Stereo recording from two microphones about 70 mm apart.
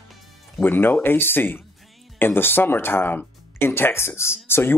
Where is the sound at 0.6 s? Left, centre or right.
Left.